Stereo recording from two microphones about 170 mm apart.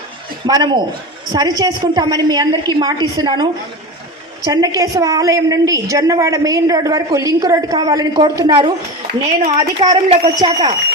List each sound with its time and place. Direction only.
0.4 s a woman's voice: 25° right (ahead or behind)
4.4 s a woman's voice: 20° right (ahead or behind)